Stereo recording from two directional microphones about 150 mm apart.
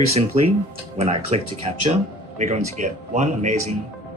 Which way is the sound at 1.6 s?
45° right (ahead or behind).